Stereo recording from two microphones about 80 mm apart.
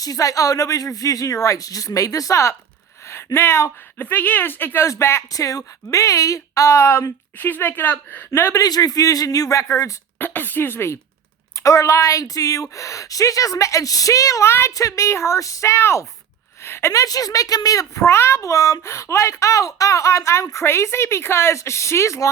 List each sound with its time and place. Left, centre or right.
0.0 s a woman's voice: left
4.0 s a woman's voice: left
8.3 s a woman's voice: left
8.6 s speech: left
10.2 s speech: left
11.6 s speech: left
14.7 s a woman's voice: left